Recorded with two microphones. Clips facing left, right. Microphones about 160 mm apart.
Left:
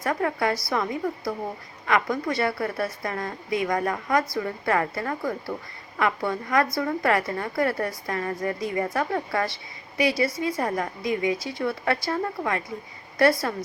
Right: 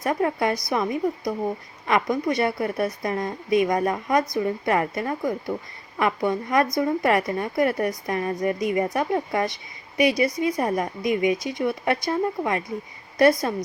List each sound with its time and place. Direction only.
0.0 s a woman's voice: 20° right (ahead or behind)